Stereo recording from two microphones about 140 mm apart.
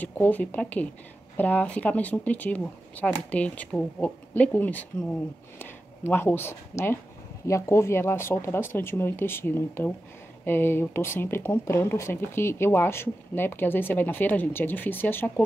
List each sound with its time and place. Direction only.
0.0 s speech: 10° left (ahead or behind)